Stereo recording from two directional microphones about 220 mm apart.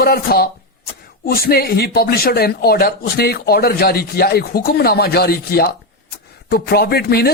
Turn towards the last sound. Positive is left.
turn(degrees=45)  # may be behind; listen again after turning